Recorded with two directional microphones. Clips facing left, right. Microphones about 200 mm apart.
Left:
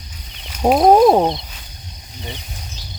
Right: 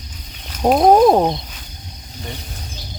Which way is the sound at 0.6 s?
Centre (ahead or behind).